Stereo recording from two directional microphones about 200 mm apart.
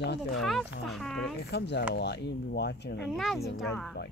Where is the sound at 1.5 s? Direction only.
60° left (ahead or behind).